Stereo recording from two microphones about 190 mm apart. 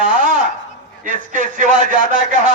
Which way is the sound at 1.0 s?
40° right (ahead or behind).